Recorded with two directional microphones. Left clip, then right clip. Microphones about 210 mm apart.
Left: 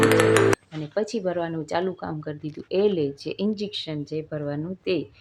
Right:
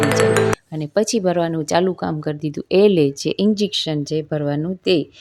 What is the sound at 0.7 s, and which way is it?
Speech, 45° right (ahead or behind).